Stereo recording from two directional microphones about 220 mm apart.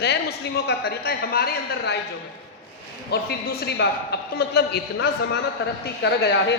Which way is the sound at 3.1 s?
50° left (ahead or behind).